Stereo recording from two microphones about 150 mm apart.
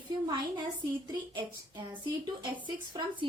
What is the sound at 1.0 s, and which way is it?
A woman's voice, 30° right (ahead or behind).